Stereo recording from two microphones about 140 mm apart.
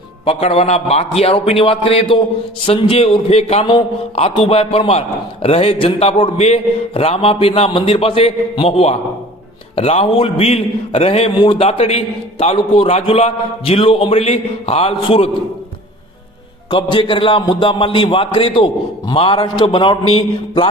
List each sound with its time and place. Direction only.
0.3 s a man's voice: 45° left (ahead or behind)
16.6 s a man's voice: 35° left (ahead or behind)